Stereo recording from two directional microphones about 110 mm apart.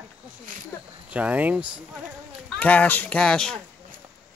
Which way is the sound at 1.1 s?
15° right (ahead or behind).